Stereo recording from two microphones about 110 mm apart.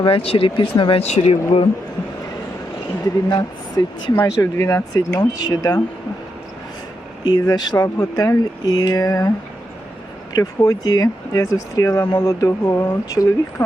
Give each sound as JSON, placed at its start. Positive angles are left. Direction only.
{"t": 0.0, "sound": "speech", "side_deg": 55}
{"t": 1.0, "sound": "speech", "side_deg": 90}
{"t": 3.0, "sound": "speech", "side_deg": 35}
{"t": 4.2, "sound": "speech", "side_deg": 25}
{"t": 7.3, "sound": "speech", "side_deg": 40}
{"t": 10.3, "sound": "speech", "side_deg": 35}